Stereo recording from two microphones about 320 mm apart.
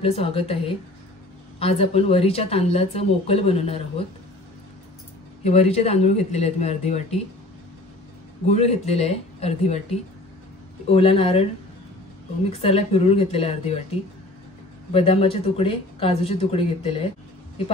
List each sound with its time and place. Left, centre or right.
0.0 s a woman's voice: centre
5.4 s speech: centre
8.5 s a woman's voice: centre
12.4 s speech: centre
14.9 s a woman's voice: centre